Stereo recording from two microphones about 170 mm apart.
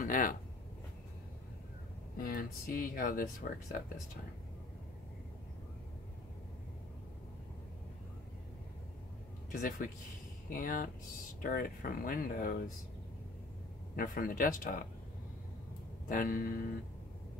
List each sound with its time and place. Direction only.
0.0 s speech: 55° left (ahead or behind)
2.1 s speech: 55° left (ahead or behind)
9.5 s speech: 55° left (ahead or behind)
13.9 s speech: 60° left (ahead or behind)
16.1 s speech: 55° left (ahead or behind)